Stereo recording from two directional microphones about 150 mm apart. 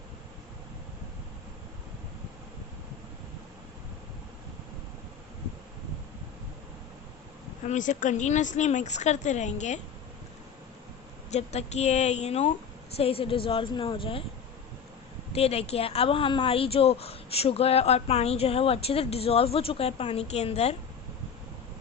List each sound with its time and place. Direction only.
7.6 s speech: 55° left (ahead or behind)
11.3 s speech: 50° left (ahead or behind)
15.3 s speech: 40° left (ahead or behind)